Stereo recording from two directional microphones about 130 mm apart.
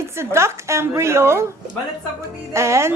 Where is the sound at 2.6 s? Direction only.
20° right (ahead or behind).